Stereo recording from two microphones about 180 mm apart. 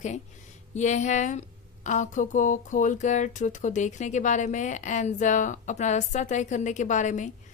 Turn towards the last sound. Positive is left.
turn(degrees=45)  # may be behind; listen again after turning